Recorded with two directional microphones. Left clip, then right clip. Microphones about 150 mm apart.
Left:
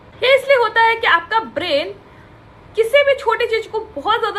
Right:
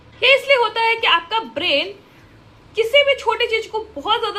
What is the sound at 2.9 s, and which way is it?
A woman's voice, 20° right (ahead or behind).